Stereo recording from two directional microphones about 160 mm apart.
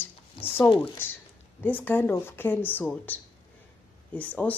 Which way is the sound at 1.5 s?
10° left (ahead or behind).